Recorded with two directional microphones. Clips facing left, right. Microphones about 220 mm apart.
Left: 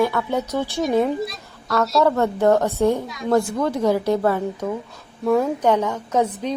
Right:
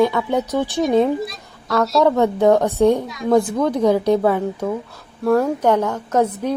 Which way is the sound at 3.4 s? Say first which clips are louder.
Right 3 dB; 15° right (ahead or behind).